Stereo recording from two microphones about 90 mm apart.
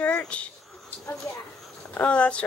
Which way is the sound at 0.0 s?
15° left (ahead or behind).